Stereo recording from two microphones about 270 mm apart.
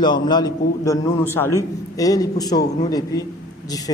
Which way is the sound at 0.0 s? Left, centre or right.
Centre.